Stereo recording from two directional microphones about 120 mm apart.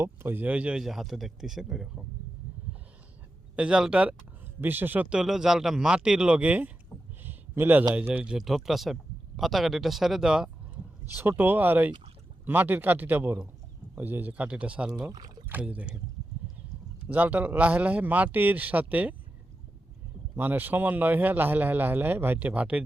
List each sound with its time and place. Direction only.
0.0 s speech: 20° right (ahead or behind); by 2.0 s 5° right (ahead or behind)
3.5 s speech: 10° right (ahead or behind)
7.2 s a sound: 15° right (ahead or behind)
7.9 s speech: 10° right (ahead or behind)
11.1 s speech: 15° right (ahead or behind)
15.1 s speech: 35° right (ahead or behind)
15.4 s speech: 15° right (ahead or behind)
17.1 s speech: 15° right (ahead or behind)
20.3 s speech: 15° right (ahead or behind)